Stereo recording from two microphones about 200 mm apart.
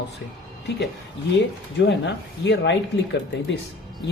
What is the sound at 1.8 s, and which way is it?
Speech, 60° left (ahead or behind).